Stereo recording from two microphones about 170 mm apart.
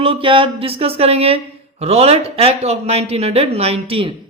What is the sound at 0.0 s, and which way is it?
Speech, 30° right (ahead or behind).